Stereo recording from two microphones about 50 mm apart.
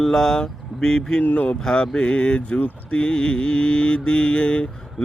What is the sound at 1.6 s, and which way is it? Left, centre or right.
Mantra, centre.